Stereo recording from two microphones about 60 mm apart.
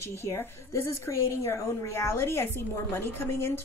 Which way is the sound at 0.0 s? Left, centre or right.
Left.